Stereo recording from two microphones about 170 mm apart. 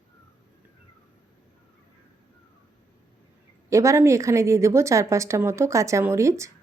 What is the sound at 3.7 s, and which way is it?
A woman's voice, 20° right (ahead or behind).